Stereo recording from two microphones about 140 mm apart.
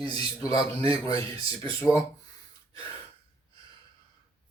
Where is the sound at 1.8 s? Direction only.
Centre (ahead or behind).